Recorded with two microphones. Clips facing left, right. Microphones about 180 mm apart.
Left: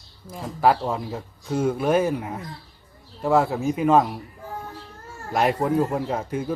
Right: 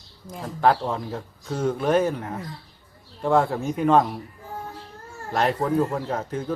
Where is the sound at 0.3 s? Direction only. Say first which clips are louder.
Left 1 dB; 5° left (ahead or behind).